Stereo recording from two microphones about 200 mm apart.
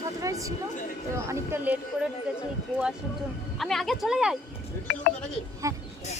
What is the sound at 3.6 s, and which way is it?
Speech, centre (ahead or behind).